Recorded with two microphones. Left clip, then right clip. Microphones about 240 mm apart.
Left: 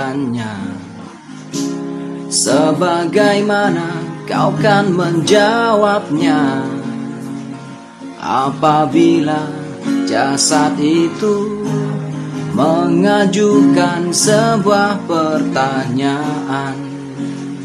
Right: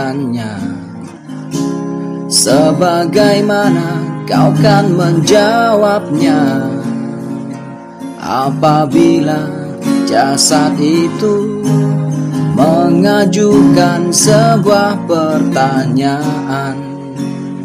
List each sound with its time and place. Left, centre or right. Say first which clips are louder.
2.3 s music: right 3 dB; right
8.3 s music: right 1 dB; right
12.5 s music: right 3 dB; right